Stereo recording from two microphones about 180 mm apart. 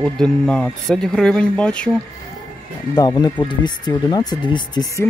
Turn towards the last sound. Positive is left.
turn(degrees=25)  # may be behind; listen again after turning